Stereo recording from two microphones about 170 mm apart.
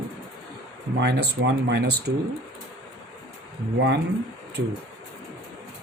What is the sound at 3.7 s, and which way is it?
Speech, 90° right.